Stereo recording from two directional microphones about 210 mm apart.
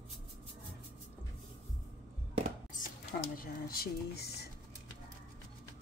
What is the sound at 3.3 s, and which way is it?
Speech, 45° left (ahead or behind).